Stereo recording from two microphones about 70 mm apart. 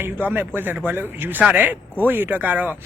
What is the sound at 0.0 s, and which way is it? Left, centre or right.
Speech, right.